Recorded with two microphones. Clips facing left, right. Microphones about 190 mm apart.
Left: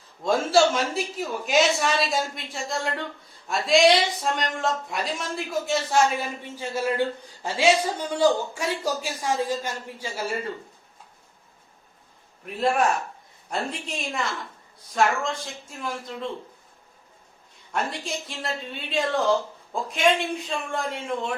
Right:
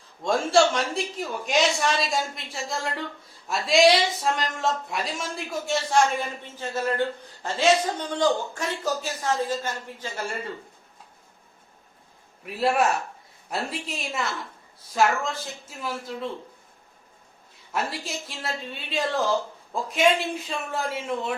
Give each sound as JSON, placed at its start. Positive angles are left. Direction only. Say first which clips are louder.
{"t": 0.2, "sound": "speech", "louder": "left 1 dB", "side_deg": 0}
{"t": 6.4, "sound": "speech", "louder": "left 1 dB", "side_deg": 10}
{"t": 12.5, "sound": "speech", "louder": "even", "side_deg": -5}
{"t": 17.7, "sound": "speech", "louder": "left 1 dB", "side_deg": -5}